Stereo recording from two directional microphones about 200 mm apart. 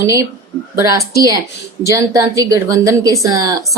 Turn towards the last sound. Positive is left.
turn(degrees=-20)  # may be behind; listen again after turning